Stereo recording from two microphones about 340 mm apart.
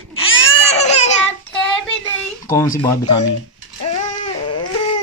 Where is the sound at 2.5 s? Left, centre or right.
Centre.